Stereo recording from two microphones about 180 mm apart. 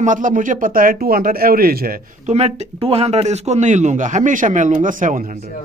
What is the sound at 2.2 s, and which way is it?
Speech, 35° right (ahead or behind).